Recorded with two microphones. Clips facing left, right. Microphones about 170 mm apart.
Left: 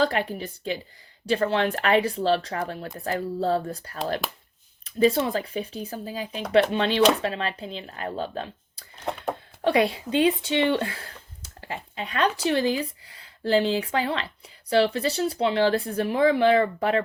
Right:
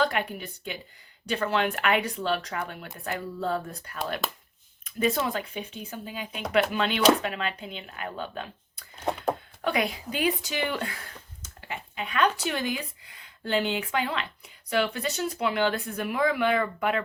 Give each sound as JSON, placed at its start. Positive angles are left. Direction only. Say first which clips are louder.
{"t": 0.0, "sound": "speech", "louder": "left 3 dB", "side_deg": 30}